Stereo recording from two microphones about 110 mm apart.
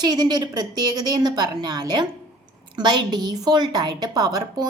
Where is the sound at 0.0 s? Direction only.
40° right (ahead or behind).